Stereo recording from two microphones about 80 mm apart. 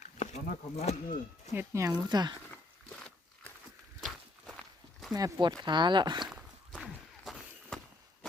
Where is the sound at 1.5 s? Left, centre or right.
Right.